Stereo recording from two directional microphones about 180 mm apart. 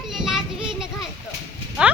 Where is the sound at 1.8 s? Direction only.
5° right (ahead or behind).